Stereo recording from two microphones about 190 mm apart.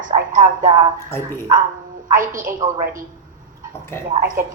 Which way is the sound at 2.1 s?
45° right (ahead or behind).